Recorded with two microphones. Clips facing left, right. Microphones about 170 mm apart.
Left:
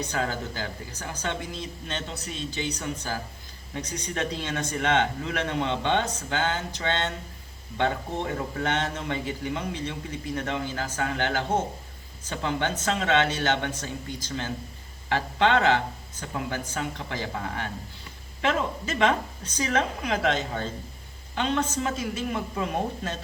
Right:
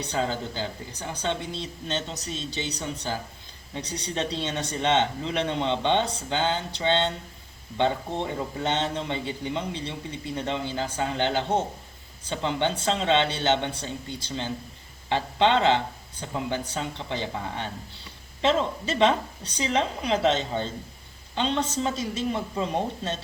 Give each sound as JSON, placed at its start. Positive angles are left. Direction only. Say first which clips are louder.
{"t": 0.0, "sound": "a woman's voice", "louder": "right 1 dB", "side_deg": -25}